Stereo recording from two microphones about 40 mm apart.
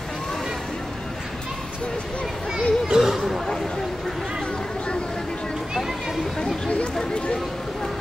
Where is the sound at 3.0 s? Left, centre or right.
Centre.